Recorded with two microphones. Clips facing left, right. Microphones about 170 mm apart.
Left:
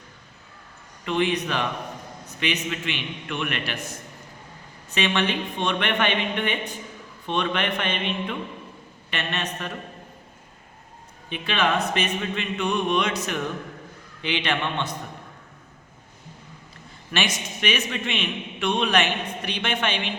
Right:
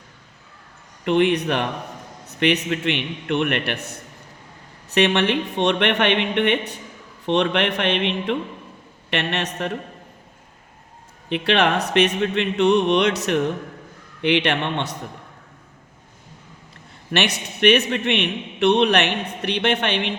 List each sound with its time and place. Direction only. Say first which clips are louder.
1.0 s a man's voice: right 6 dB; 60° right (ahead or behind)
4.9 s a man's voice: right 6 dB; 60° right (ahead or behind)
7.3 s music: right 6 dB; 70° right (ahead or behind)
9.0 s a man's voice: right 5 dB; 65° right (ahead or behind)
11.3 s a man's voice: right 5 dB; 65° right (ahead or behind)
11.9 s music: right 8 dB; 65° right (ahead or behind)
14.2 s a man's voice: right 6 dB; 60° right (ahead or behind)
17.1 s a man's voice: right 4 dB; 65° right (ahead or behind)